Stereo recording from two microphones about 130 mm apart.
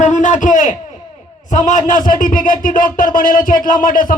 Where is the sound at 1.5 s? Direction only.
70° left (ahead or behind).